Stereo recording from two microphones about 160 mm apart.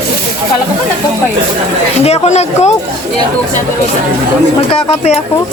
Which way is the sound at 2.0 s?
45° left (ahead or behind).